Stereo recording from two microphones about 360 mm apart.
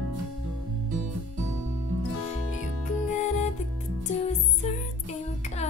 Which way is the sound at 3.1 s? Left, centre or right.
Centre.